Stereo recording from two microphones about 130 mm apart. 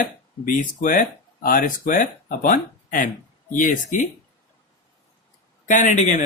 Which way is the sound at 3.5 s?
80° left.